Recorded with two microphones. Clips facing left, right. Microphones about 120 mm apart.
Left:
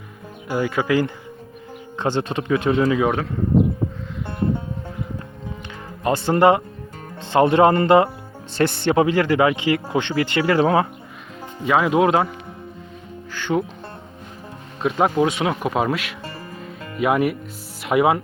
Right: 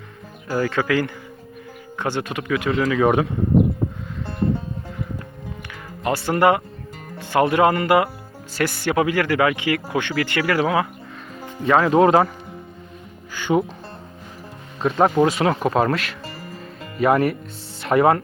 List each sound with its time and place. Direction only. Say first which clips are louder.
0.4 s speech: even; 15° left (ahead or behind)
6.0 s speech: left 2 dB; 25° left (ahead or behind)
11.6 s speech: right 2 dB; 5° left (ahead or behind)
13.3 s speech: right 2 dB; 10° right (ahead or behind)
14.8 s speech: right 2 dB; centre (ahead or behind)